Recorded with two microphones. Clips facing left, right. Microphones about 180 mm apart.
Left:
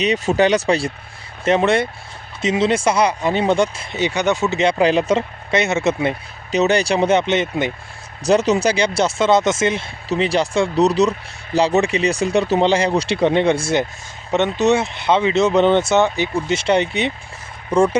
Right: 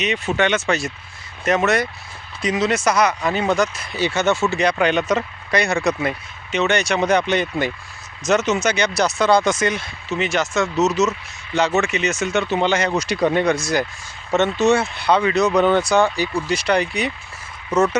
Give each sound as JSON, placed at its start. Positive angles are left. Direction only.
{"t": 0.0, "sound": "speech", "side_deg": 35}
{"t": 8.2, "sound": "speech", "side_deg": 35}
{"t": 14.3, "sound": "speech", "side_deg": 15}